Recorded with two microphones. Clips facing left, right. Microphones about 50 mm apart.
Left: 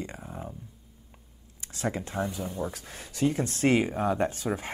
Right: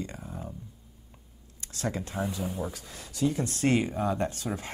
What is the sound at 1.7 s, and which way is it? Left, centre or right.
Speech, left.